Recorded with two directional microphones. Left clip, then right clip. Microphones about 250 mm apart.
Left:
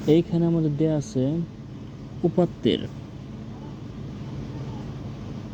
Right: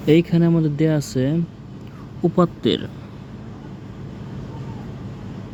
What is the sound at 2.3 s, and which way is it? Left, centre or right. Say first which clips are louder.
Speech: right 4 dB; centre.